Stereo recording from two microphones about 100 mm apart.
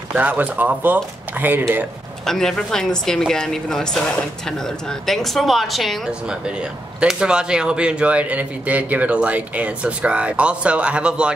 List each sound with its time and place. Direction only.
0.1 s a man's voice: 15° right (ahead or behind)
2.2 s a woman's voice: 5° left (ahead or behind)